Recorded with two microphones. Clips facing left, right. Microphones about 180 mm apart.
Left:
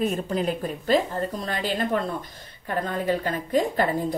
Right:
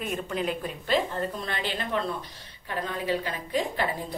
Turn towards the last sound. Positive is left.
turn(degrees=45)  # may be behind; listen again after turning